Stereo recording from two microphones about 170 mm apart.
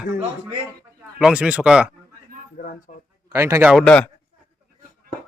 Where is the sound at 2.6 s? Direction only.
55° left (ahead or behind).